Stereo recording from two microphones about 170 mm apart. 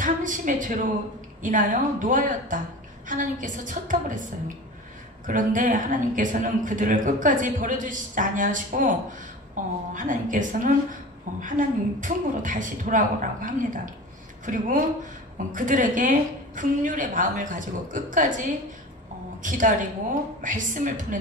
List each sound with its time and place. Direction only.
0.0 s a woman's voice: 50° right (ahead or behind)
19.4 s a woman's voice: 50° right (ahead or behind)